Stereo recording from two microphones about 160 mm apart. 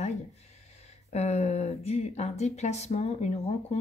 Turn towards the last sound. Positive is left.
turn(degrees=40)  # may be behind; listen again after turning